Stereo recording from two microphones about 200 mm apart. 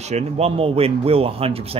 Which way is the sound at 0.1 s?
30° right (ahead or behind).